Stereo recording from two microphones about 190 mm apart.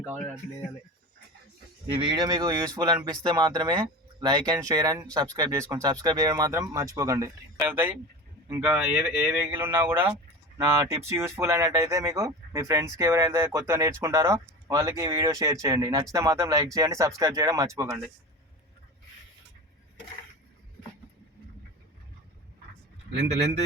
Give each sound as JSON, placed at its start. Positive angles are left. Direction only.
{"t": 1.9, "sound": "speech", "side_deg": -25}